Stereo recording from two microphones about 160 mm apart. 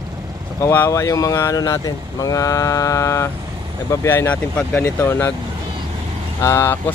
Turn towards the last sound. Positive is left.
turn(degrees=15)  # may be behind; listen again after turning